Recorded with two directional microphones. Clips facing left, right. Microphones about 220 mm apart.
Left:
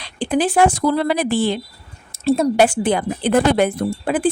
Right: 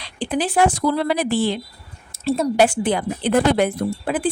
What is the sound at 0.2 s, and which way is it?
A woman's voice, 50° left (ahead or behind).